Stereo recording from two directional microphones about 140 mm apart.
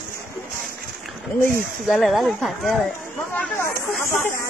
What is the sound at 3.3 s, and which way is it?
Speech, 15° left (ahead or behind).